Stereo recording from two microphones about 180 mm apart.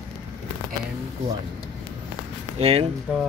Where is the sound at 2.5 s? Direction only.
35° right (ahead or behind).